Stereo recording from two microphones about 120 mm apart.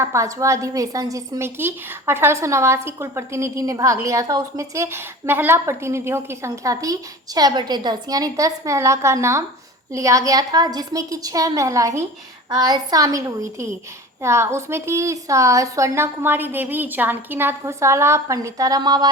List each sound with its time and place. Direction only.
0.0 s a woman's voice: 25° right (ahead or behind)